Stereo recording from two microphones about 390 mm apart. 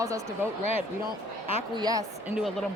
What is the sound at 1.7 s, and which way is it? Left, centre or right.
Speech, centre.